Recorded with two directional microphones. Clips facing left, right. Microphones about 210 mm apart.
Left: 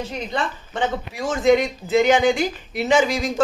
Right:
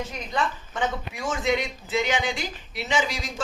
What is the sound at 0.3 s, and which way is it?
A man's voice, 30° left (ahead or behind).